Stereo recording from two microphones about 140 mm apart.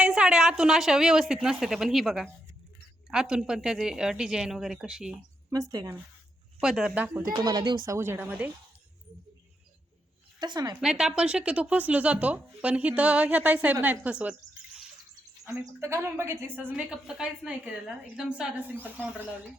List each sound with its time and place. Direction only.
0.0 s a woman's voice: 5° right (ahead or behind)
5.5 s speech: 25° right (ahead or behind)
6.6 s a woman's voice: 5° right (ahead or behind)
7.2 s a woman's voice: 25° right (ahead or behind)
10.4 s speech: 30° right (ahead or behind)
10.8 s a woman's voice: 5° right (ahead or behind)
15.4 s a woman's voice: 20° right (ahead or behind)